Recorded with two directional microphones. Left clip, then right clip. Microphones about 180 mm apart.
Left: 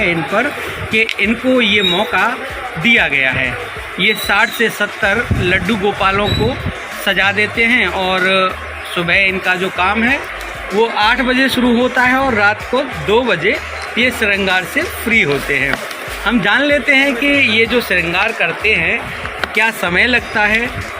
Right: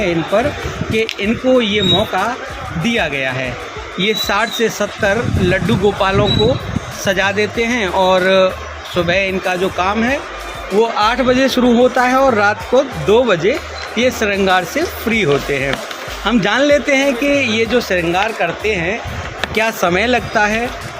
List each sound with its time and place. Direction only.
0.0 s a man's voice: 25° right (ahead or behind); by 18.9 s 45° right (ahead or behind)
19.5 s speech: 60° right (ahead or behind)